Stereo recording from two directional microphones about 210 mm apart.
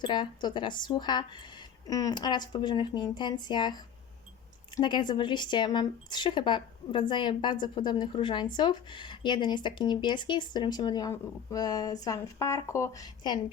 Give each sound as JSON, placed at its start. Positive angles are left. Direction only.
{"t": 0.0, "sound": "speech", "side_deg": 20}
{"t": 4.8, "sound": "a woman's voice", "side_deg": 20}